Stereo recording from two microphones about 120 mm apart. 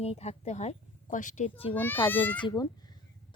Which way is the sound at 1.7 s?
15° left (ahead or behind).